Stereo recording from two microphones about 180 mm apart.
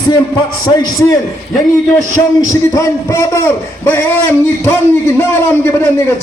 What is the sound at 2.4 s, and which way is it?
A man's voice, 15° left (ahead or behind).